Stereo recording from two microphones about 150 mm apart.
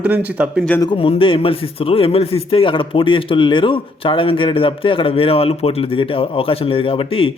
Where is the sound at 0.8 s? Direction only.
35° left (ahead or behind).